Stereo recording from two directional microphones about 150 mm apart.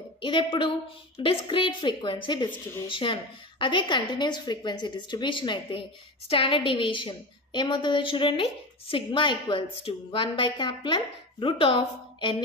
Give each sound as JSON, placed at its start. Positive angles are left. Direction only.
{"t": 0.2, "sound": "a woman's voice", "side_deg": 35}